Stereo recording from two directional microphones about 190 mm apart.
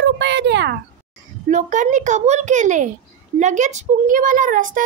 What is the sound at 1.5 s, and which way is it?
A child's voice, 40° right (ahead or behind).